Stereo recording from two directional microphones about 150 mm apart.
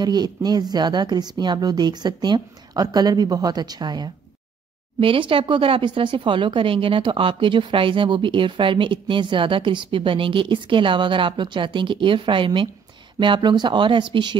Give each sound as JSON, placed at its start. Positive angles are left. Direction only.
{"t": 0.0, "sound": "speech", "side_deg": -25}